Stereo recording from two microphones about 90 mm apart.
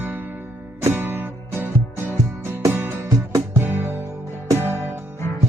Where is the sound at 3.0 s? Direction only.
40° right (ahead or behind).